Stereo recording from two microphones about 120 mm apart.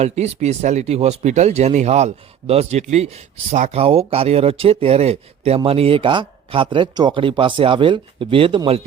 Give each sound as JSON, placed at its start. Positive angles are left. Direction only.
{"t": 0.0, "sound": "speech", "side_deg": -65}